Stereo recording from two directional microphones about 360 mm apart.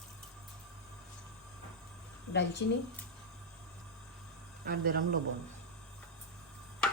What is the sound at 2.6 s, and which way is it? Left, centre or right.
Speech, left.